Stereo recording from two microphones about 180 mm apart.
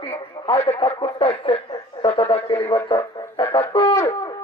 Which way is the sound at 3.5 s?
25° left (ahead or behind).